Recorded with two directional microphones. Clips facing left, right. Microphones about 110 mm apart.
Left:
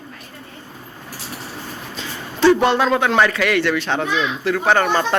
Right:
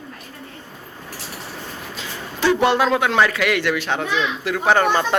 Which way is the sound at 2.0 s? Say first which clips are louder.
Left 6 dB; 10° right (ahead or behind).